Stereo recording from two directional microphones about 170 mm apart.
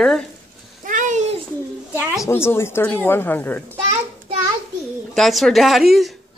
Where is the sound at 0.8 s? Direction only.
50° right (ahead or behind).